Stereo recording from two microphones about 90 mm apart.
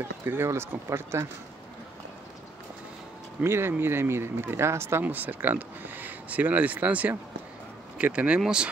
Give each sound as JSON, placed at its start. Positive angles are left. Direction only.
{"t": 0.0, "sound": "speech", "side_deg": -25}
{"t": 3.4, "sound": "speech", "side_deg": -25}